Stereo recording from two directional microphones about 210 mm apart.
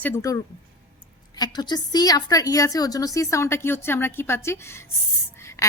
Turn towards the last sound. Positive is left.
turn(degrees=15)  # may be behind; listen again after turning